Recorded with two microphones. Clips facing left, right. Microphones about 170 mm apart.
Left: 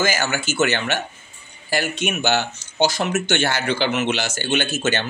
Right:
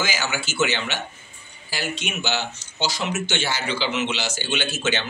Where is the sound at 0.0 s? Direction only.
50° left (ahead or behind).